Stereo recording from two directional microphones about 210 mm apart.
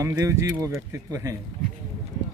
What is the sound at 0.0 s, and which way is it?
Speech, 15° right (ahead or behind).